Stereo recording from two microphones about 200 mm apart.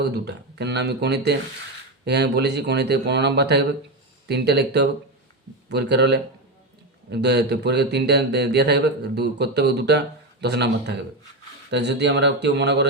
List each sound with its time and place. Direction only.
0.3 s speech: 55° right (ahead or behind)